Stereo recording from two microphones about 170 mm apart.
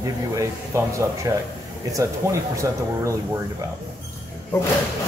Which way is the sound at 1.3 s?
15° right (ahead or behind).